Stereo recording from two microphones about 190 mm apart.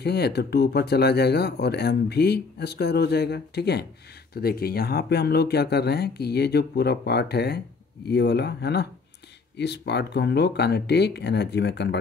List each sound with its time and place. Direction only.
0.0 s speech: 60° left (ahead or behind)